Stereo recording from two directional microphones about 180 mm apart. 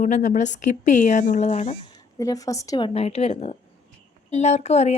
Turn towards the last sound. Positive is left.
turn(degrees=35)  # may be behind; listen again after turning